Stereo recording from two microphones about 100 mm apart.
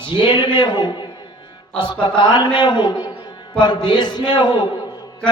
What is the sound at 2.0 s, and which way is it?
Speech, 50° left (ahead or behind).